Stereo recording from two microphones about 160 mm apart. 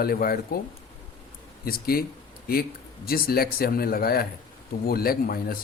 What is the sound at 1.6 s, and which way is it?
Speech, 70° left (ahead or behind).